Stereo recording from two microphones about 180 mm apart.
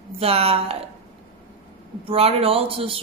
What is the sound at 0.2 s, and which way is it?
Speech, 35° right (ahead or behind).